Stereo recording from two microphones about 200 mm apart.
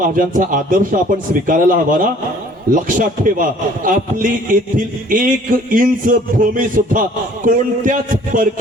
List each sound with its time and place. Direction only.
0.2 s speech: 40° right (ahead or behind)
3.8 s a sound: 40° right (ahead or behind)
5.0 s speech: 45° right (ahead or behind)